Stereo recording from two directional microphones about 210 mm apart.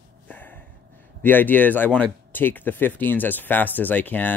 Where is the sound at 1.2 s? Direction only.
10° left (ahead or behind).